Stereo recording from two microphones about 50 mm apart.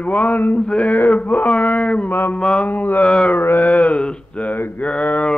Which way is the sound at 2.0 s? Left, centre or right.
Left.